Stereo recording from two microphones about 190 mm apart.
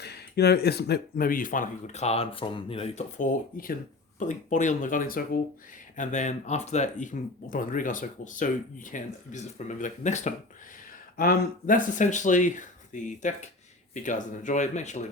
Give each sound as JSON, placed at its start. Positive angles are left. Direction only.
{"t": 0.0, "sound": "speech", "side_deg": 60}
{"t": 3.2, "sound": "speech", "side_deg": 50}
{"t": 11.2, "sound": "speech", "side_deg": 50}